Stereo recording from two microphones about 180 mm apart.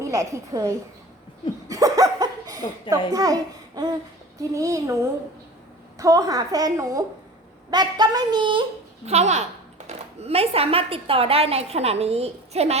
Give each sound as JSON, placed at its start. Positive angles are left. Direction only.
{"t": 0.0, "sound": "a woman's voice", "side_deg": -20}
{"t": 1.6, "sound": "a sound", "side_deg": -20}
{"t": 3.1, "sound": "a woman's voice", "side_deg": -20}
{"t": 6.0, "sound": "a woman's voice", "side_deg": -20}
{"t": 9.0, "sound": "speech", "side_deg": -40}